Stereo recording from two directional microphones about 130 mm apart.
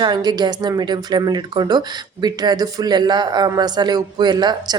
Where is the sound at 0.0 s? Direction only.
35° right (ahead or behind).